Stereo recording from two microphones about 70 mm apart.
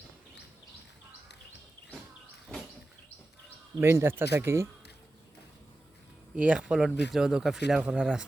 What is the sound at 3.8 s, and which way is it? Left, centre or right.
Speech, right.